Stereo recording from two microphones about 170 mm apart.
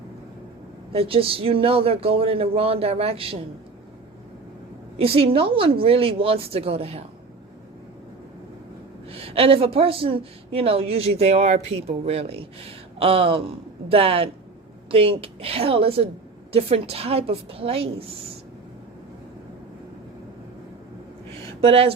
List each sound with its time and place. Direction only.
0.9 s a woman's voice: 35° right (ahead or behind)
4.9 s a woman's voice: 35° right (ahead or behind)
9.0 s a woman's voice: 35° right (ahead or behind)
21.6 s a woman's voice: 35° right (ahead or behind)